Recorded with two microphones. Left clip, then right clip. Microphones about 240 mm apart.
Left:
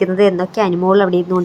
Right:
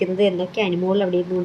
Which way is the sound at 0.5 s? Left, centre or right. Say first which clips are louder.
Left 7 dB; centre.